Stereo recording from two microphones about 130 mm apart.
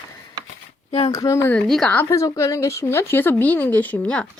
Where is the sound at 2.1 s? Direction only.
25° left (ahead or behind).